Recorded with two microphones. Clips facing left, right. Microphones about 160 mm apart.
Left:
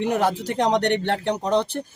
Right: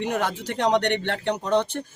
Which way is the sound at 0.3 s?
35° left (ahead or behind).